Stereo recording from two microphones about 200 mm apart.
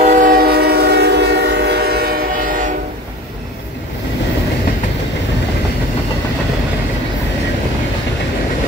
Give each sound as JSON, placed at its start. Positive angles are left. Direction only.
{"t": 0.0, "sound": "train", "side_deg": -40}